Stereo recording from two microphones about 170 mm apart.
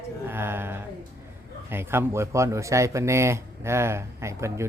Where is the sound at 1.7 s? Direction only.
15° right (ahead or behind).